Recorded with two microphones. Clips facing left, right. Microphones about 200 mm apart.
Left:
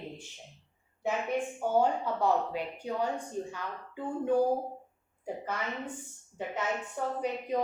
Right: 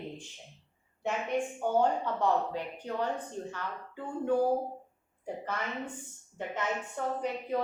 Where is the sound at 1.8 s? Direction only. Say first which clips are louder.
Left 1 dB; 10° left (ahead or behind).